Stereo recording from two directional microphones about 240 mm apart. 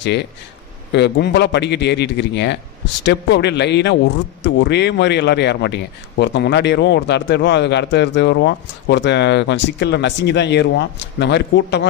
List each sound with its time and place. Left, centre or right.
0.0 s a man's voice: left